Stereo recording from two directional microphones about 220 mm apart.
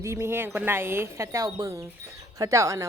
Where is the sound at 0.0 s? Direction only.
10° right (ahead or behind).